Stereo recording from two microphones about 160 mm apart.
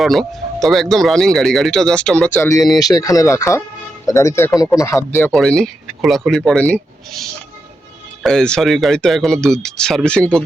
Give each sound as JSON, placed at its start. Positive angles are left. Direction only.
{"t": 0.0, "sound": "speech", "side_deg": 0}
{"t": 5.3, "sound": "speech", "side_deg": 5}